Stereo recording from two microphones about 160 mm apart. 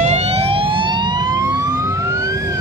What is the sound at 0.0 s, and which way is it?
Emergency vehicle, 40° right (ahead or behind).